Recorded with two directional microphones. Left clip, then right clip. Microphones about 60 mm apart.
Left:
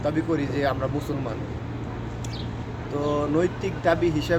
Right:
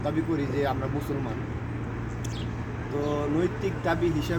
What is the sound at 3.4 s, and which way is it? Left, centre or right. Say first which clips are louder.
Speech: left 3 dB; left.